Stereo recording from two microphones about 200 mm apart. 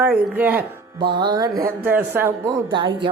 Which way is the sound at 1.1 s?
20° right (ahead or behind).